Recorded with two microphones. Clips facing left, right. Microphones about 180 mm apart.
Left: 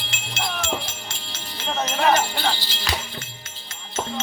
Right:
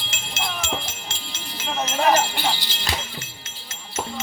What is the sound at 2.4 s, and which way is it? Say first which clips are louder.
Music: left 1 dB; 15° right (ahead or behind).